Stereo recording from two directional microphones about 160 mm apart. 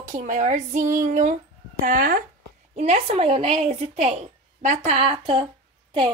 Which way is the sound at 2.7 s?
45° right (ahead or behind).